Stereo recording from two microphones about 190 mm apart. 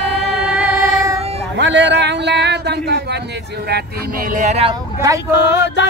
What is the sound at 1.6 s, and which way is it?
A man's voice, 70° right (ahead or behind).